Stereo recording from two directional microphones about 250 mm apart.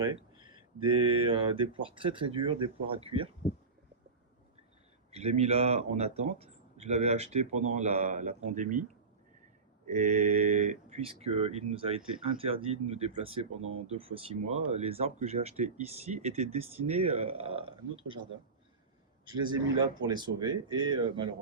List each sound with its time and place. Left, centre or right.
0.0 s speech: centre
5.1 s speech: right
9.8 s speech: right
13.6 s speech: right
13.8 s speech: right
20.1 s speech: centre